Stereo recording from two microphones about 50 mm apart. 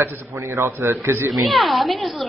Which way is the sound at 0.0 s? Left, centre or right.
Right.